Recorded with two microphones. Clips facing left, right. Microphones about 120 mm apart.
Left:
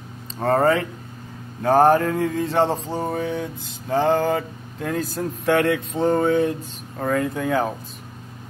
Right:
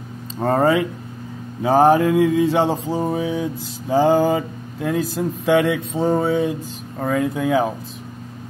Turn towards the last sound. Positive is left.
turn(degrees=-10)  # may be behind; listen again after turning